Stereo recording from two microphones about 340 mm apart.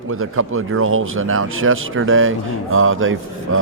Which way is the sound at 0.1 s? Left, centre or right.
Right.